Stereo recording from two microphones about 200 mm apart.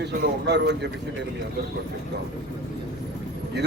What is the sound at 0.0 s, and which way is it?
Speech, 60° right (ahead or behind).